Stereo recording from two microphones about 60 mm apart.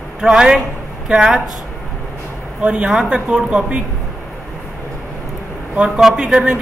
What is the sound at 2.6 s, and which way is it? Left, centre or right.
A woman's voice, centre.